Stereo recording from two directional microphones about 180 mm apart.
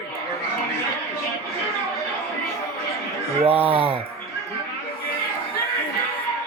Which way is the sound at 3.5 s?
10° right (ahead or behind).